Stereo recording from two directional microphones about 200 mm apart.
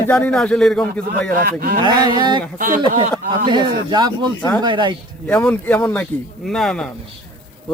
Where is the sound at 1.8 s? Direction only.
20° right (ahead or behind).